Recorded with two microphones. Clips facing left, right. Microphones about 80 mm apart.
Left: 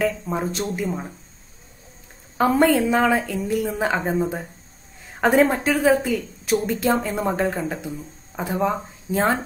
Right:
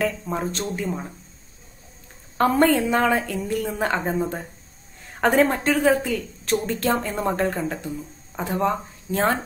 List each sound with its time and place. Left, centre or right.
0.0 s speech: centre
2.3 s a woman's voice: centre